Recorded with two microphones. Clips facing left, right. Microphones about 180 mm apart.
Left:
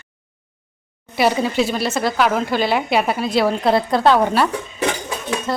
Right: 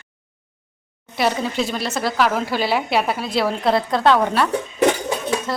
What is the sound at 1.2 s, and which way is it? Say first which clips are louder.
Speech: left 3 dB; 5° left (ahead or behind).